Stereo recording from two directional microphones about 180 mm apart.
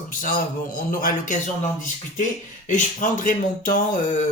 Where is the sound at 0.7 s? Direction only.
50° left (ahead or behind).